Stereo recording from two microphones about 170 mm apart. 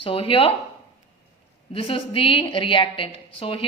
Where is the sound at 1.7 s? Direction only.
30° left (ahead or behind).